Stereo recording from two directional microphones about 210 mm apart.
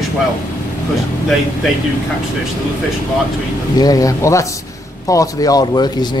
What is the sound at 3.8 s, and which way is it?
Speech, 15° left (ahead or behind).